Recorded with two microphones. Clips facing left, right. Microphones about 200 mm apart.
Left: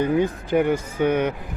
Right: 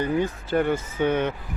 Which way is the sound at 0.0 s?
15° left (ahead or behind).